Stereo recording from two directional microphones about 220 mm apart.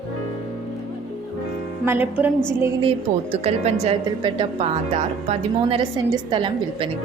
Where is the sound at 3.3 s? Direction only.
30° right (ahead or behind).